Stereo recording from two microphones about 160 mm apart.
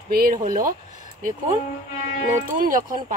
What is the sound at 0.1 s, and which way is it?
Speech, 65° right (ahead or behind).